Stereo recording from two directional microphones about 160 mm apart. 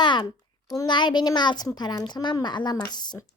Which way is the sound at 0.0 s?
25° left (ahead or behind).